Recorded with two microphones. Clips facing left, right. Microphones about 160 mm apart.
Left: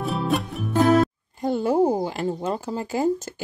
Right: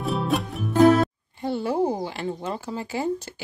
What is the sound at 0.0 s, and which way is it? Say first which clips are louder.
Music: even; centre (ahead or behind).